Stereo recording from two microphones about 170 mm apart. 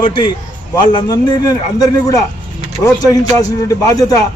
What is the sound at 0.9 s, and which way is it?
A man's voice, 25° left (ahead or behind).